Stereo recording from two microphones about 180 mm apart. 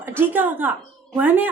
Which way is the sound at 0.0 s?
10° right (ahead or behind).